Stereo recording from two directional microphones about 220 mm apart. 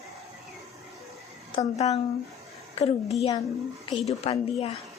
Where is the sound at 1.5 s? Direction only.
30° left (ahead or behind).